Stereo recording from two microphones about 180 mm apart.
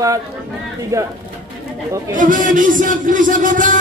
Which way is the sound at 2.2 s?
45° right (ahead or behind).